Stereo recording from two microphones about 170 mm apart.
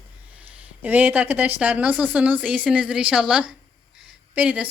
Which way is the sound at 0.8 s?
10° right (ahead or behind).